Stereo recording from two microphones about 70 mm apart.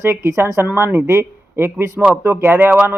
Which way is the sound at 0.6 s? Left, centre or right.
Right.